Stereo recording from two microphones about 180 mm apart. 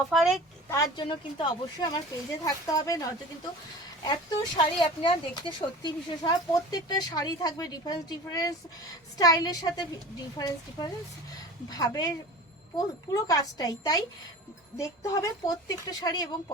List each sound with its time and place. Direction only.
0.1 s speech: centre (ahead or behind)
0.7 s speech: 20° left (ahead or behind)